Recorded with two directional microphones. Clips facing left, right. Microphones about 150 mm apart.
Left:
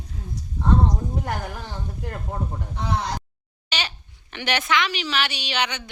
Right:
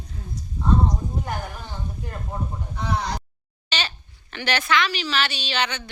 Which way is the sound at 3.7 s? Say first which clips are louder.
Right 1 dB; 15° left (ahead or behind).